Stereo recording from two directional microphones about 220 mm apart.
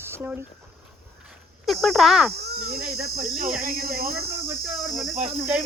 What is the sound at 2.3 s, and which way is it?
Speech, 45° right (ahead or behind).